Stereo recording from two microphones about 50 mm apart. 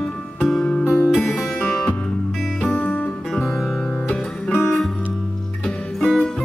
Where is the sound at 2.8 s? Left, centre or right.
Left.